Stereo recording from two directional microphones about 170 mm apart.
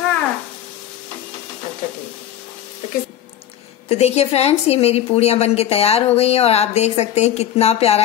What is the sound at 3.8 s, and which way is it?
A woman's voice, 40° left (ahead or behind).